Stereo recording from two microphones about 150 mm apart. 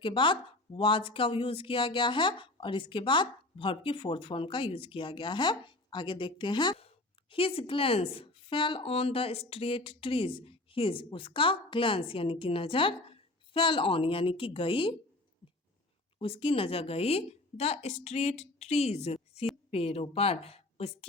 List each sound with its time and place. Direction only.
0.0 s speech: 35° left (ahead or behind)
16.2 s a woman's voice: 35° left (ahead or behind)